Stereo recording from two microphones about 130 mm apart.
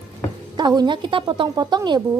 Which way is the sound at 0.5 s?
35° right (ahead or behind).